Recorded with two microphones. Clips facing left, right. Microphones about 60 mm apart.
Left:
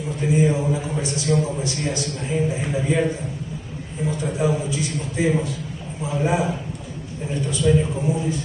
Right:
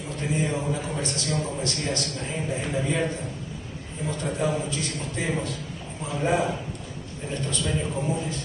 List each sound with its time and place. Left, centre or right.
0.2 s a man's voice: centre